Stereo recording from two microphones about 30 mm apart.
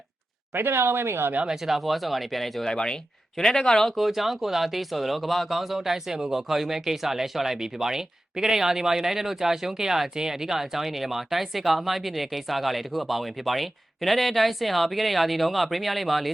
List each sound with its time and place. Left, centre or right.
1.5 s speech: centre
2.6 s speech: left
3.9 s speech: centre